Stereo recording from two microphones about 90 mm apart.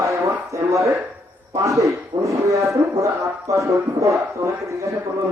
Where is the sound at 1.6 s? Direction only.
35° right (ahead or behind).